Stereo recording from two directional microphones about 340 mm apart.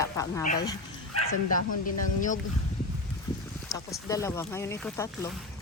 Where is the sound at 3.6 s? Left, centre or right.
Centre.